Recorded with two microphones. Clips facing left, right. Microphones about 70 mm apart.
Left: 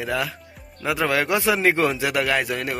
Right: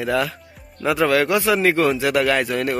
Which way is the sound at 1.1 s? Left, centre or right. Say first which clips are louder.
Right 1 dB; centre.